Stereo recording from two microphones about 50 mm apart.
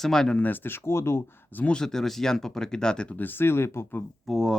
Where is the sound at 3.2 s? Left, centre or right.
Left.